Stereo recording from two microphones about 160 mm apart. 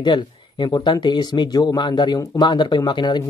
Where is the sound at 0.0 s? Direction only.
25° left (ahead or behind).